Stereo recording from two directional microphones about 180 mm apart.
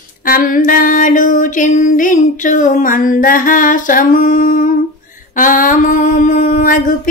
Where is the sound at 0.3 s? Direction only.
50° left (ahead or behind).